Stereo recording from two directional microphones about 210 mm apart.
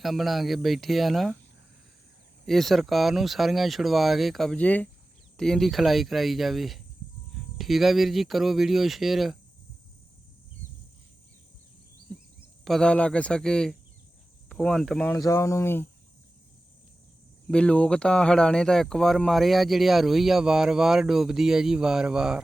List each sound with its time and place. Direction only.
0.0 s speech: centre (ahead or behind)
2.5 s speech: centre (ahead or behind)
12.6 s speech: centre (ahead or behind)
15.1 s speech: 15° left (ahead or behind)
17.5 s speech: 5° left (ahead or behind)